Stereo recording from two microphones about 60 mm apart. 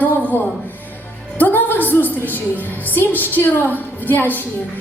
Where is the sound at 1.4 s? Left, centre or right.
Left.